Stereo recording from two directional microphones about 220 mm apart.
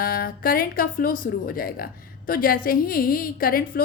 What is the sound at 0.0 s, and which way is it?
A woman's voice, 40° left (ahead or behind).